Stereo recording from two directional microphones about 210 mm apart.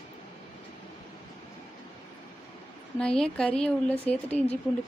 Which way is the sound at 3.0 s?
5° left (ahead or behind).